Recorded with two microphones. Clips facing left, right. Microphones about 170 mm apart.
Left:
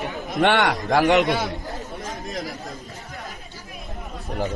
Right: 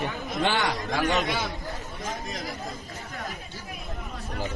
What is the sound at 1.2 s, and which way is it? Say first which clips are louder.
Speech: left 6 dB; 50° left (ahead or behind).